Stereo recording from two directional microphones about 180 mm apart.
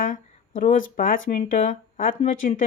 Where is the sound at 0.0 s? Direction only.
45° left (ahead or behind).